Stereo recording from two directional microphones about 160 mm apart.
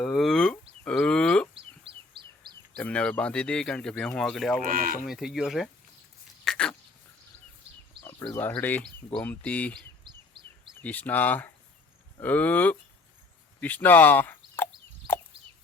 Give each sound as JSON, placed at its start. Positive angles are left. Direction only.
{"t": 0.0, "sound": "a sound", "side_deg": 5}
{"t": 1.5, "sound": "chicken", "side_deg": -35}
{"t": 2.7, "sound": "speech", "side_deg": 5}
{"t": 4.7, "sound": "speech", "side_deg": -60}
{"t": 5.0, "sound": "speech", "side_deg": 0}
{"t": 6.4, "sound": "dog", "side_deg": 5}
{"t": 8.3, "sound": "speech", "side_deg": 15}
{"t": 10.0, "sound": "bird vocalization", "side_deg": -30}
{"t": 10.8, "sound": "speech", "side_deg": 10}